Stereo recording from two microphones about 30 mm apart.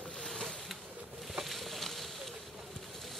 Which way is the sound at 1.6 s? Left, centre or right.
Centre.